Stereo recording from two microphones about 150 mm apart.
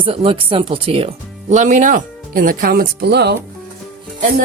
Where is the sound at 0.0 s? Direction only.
35° right (ahead or behind); by 3.3 s 90° right.